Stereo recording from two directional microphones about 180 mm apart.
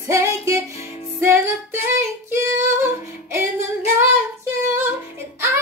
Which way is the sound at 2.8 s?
15° right (ahead or behind).